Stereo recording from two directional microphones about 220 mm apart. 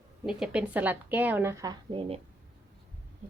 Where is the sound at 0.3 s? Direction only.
5° right (ahead or behind); by 2.2 s 25° right (ahead or behind).